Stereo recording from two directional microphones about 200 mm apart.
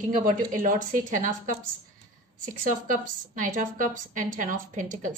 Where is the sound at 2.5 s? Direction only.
40° right (ahead or behind).